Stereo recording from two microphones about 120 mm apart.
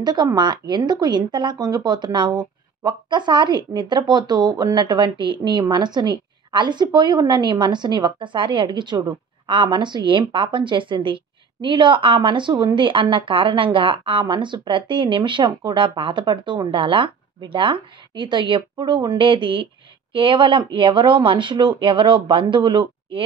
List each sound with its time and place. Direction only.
0.0 s speech: 35° right (ahead or behind)